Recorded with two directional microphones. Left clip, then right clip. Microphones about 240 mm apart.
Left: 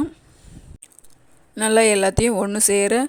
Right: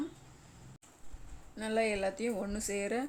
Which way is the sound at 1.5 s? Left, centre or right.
Left.